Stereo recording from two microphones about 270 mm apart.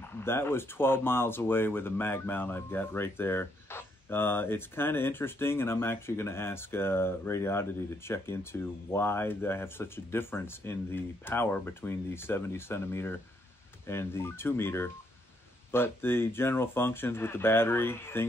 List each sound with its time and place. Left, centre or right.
0.0 s speech: centre